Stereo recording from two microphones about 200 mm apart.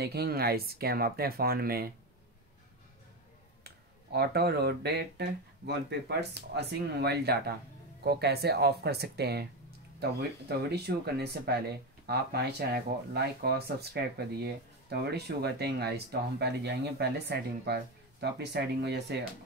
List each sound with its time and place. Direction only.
0.0 s speech: 55° right (ahead or behind)
3.6 s speech: 55° right (ahead or behind)
10.5 s speech: 55° right (ahead or behind)